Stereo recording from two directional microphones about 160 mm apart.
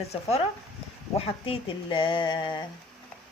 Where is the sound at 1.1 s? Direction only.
35° left (ahead or behind).